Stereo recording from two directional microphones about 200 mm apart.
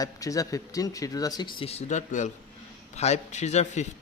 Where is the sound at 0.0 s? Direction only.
15° left (ahead or behind).